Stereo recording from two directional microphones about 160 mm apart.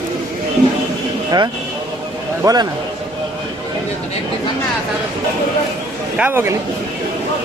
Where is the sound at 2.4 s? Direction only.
25° right (ahead or behind).